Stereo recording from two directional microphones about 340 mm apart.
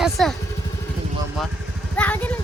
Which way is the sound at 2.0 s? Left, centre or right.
Centre.